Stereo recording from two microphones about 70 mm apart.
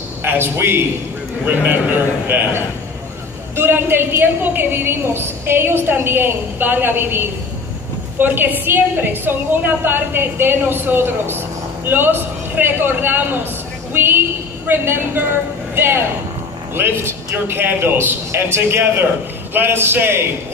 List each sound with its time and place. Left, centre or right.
0.2 s a man's voice: right